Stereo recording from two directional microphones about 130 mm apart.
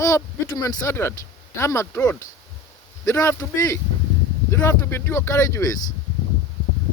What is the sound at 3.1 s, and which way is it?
Speech, 25° left (ahead or behind).